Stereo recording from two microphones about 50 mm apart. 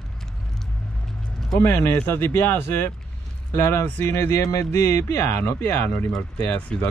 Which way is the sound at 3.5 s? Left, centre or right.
Left.